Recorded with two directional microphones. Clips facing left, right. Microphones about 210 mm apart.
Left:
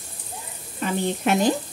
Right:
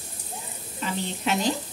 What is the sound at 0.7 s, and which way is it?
Speech, 55° left (ahead or behind).